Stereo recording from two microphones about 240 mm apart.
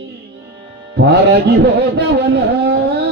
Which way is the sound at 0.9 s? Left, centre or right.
Right.